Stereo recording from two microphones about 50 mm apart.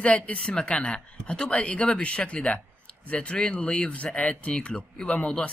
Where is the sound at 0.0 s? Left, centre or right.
Left.